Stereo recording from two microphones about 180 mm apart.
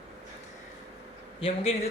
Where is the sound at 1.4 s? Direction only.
35° left (ahead or behind).